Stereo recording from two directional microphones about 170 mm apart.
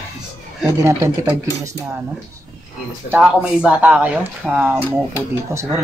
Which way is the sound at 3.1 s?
5° right (ahead or behind).